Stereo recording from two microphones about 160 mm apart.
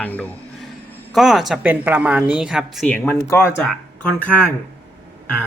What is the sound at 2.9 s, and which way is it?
Speech, 10° left (ahead or behind).